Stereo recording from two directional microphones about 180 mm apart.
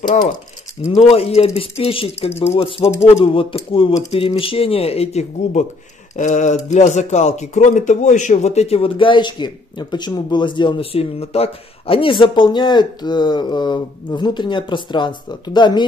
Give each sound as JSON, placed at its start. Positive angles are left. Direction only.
{"t": 0.9, "sound": "speech", "side_deg": 35}